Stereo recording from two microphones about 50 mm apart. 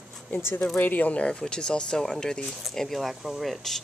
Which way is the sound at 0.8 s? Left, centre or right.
Left.